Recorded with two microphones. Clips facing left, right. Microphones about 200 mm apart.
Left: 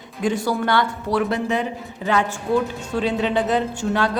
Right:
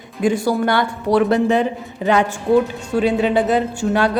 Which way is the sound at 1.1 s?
35° right (ahead or behind).